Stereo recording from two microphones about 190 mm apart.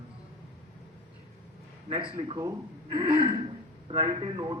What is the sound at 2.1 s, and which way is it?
Speech, 30° right (ahead or behind).